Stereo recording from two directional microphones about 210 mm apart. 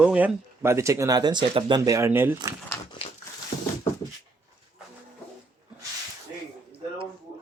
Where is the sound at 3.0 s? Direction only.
25° left (ahead or behind).